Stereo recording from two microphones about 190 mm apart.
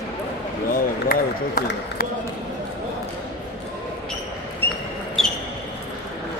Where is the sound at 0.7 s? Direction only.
50° left (ahead or behind).